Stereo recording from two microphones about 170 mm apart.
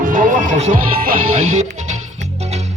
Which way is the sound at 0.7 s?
55° right (ahead or behind).